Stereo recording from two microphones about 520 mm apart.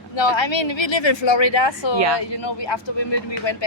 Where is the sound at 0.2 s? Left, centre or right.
Left.